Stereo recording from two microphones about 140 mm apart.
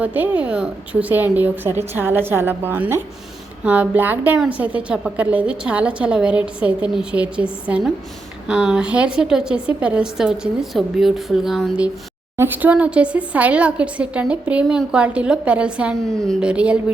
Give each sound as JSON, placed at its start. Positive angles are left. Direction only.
{"t": 0.0, "sound": "a woman's voice", "side_deg": -10}
{"t": 12.4, "sound": "a woman's voice", "side_deg": -15}